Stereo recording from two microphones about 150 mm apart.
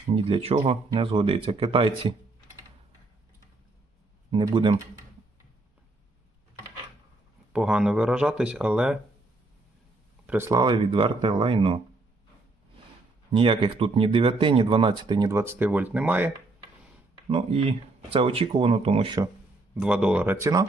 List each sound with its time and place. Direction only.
0.2 s speech: 35° right (ahead or behind)
4.3 s speech: 30° right (ahead or behind)
7.5 s speech: 5° right (ahead or behind)
10.2 s speech: 15° right (ahead or behind); by 11.8 s 35° right (ahead or behind)
13.3 s speech: 35° right (ahead or behind)
15.3 s speech: 20° right (ahead or behind)
17.2 s speech: 40° right (ahead or behind)
19.7 s speech: 5° right (ahead or behind)